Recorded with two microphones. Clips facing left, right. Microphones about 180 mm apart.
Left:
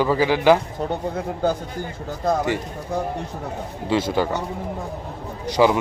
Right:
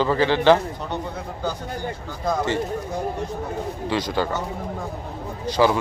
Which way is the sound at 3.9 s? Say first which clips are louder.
Left 4 dB; 20° left (ahead or behind).